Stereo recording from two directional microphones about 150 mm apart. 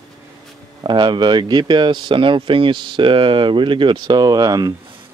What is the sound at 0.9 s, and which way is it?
Speech, 30° right (ahead or behind).